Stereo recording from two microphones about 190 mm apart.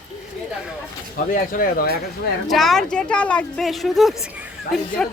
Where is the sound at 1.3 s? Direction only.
50° left (ahead or behind).